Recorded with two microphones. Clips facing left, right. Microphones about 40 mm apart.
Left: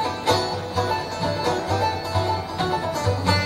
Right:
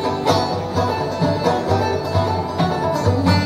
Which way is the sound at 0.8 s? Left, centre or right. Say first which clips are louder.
Right 4 dB; right.